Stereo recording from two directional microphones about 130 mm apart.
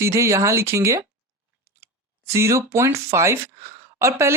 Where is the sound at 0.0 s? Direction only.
20° right (ahead or behind).